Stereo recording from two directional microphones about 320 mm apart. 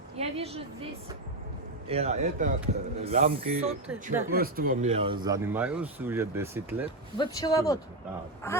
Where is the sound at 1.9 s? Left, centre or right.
Centre.